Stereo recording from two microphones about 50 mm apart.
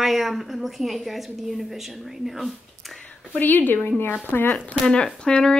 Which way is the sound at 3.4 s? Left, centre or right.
Left.